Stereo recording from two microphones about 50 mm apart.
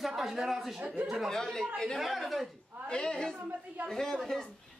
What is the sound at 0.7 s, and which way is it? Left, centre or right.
Speech, right.